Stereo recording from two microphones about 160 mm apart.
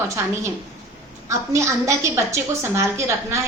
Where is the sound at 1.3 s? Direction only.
20° right (ahead or behind).